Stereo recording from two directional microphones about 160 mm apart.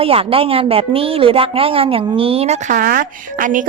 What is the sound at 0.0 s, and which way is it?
A woman's voice, 35° right (ahead or behind).